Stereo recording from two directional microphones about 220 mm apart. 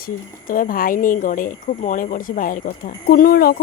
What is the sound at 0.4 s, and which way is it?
Speech, 40° left (ahead or behind).